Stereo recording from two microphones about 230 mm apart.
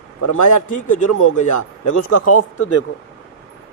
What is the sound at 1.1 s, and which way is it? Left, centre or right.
Speech, left.